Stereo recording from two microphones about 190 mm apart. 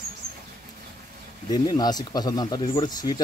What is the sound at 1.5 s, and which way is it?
Speech, 20° left (ahead or behind).